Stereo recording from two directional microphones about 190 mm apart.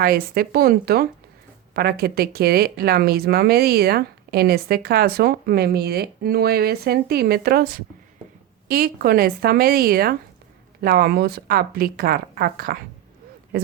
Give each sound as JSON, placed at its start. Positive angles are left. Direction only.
{"t": 0.0, "sound": "speech", "side_deg": -50}